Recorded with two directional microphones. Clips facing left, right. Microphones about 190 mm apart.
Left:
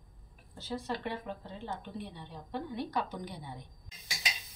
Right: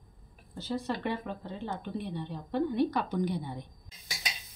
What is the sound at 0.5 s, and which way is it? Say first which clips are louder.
A woman's voice: right 4 dB; 65° right (ahead or behind).